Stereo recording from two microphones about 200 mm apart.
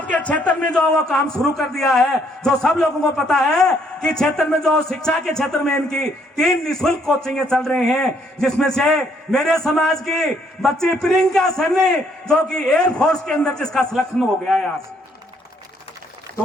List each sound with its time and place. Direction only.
0.0 s a man's voice: 5° left (ahead or behind)